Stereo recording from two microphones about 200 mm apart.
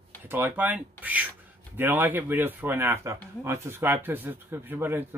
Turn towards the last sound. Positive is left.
turn(degrees=-10)  # may be behind; listen again after turning